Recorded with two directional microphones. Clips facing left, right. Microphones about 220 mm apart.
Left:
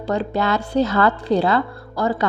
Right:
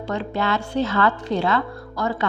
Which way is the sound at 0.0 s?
35° left (ahead or behind).